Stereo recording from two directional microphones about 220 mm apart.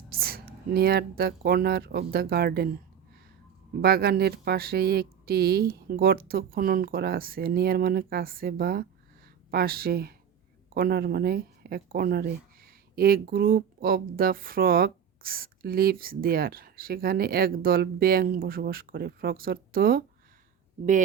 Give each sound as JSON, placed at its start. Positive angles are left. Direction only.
{"t": 0.1, "sound": "speech", "side_deg": -45}
{"t": 3.8, "sound": "speech", "side_deg": -45}